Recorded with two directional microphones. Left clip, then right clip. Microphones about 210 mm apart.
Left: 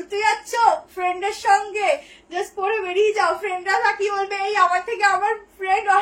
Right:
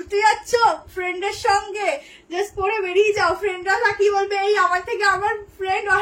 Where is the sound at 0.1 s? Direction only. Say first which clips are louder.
Right 3 dB; 25° right (ahead or behind).